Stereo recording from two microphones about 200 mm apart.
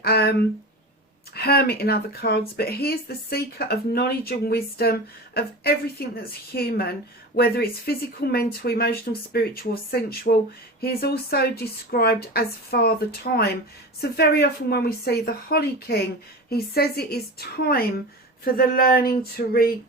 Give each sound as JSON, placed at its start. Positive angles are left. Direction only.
{"t": 0.0, "sound": "speech", "side_deg": 50}